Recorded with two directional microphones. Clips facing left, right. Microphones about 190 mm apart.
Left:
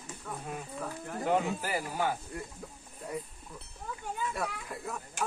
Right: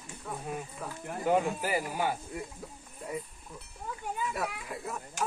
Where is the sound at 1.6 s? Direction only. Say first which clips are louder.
Right 1 dB; 15° right (ahead or behind).